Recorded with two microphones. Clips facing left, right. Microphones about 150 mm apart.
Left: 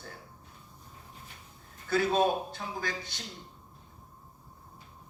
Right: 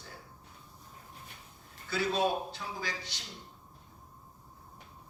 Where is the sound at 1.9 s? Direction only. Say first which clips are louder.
Left 4 dB; 50° left (ahead or behind).